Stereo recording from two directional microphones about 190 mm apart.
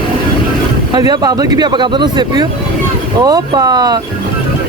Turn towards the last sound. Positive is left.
turn(degrees=-20)  # may be behind; listen again after turning